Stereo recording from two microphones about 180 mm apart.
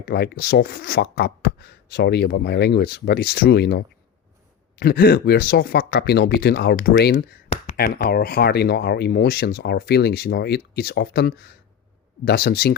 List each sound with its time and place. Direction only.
0.0 s speech: 60° left (ahead or behind)